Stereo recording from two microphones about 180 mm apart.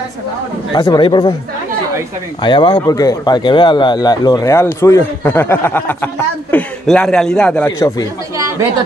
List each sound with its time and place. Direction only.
0.7 s speech: 25° left (ahead or behind)
2.4 s a man's voice: 25° left (ahead or behind)